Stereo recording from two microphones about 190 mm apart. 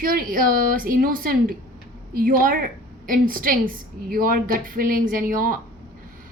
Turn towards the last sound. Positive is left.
turn(degrees=-45)  # may be behind; listen again after turning